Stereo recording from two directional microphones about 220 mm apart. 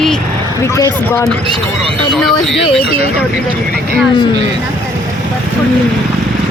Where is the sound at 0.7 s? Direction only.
15° left (ahead or behind).